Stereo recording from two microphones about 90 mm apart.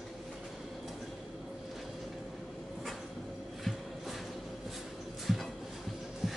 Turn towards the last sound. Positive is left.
turn(degrees=-5)  # may be behind; listen again after turning